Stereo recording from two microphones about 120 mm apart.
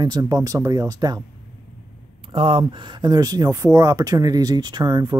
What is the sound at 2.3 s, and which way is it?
Speech, 50° right (ahead or behind).